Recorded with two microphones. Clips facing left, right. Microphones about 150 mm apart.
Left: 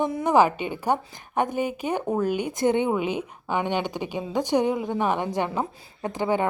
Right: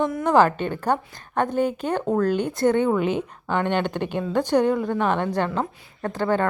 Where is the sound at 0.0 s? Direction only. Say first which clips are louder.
Right 2 dB; 15° left (ahead or behind).